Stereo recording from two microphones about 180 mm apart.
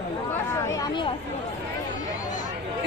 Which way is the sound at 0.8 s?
25° left (ahead or behind).